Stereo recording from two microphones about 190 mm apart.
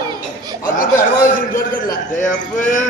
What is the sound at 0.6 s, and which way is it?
Speech, 45° left (ahead or behind).